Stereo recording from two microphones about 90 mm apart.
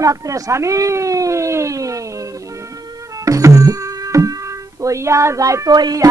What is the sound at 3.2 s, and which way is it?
Music, 35° right (ahead or behind).